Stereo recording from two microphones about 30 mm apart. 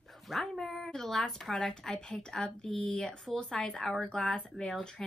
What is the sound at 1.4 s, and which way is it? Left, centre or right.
A woman's voice, centre.